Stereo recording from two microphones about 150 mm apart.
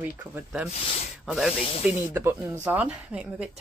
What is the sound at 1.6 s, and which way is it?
Snake, 40° left (ahead or behind).